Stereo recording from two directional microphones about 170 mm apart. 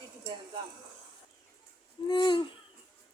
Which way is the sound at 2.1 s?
25° left (ahead or behind).